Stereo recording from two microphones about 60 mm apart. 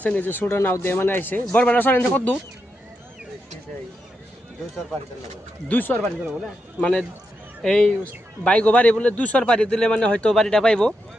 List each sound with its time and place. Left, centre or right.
0.0 s speech: left
5.6 s a man's voice: left